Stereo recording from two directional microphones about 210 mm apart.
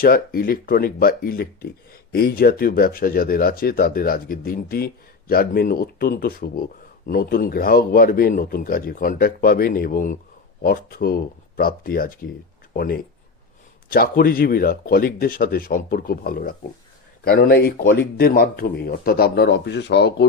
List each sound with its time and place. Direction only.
0.0 s speech: 45° left (ahead or behind)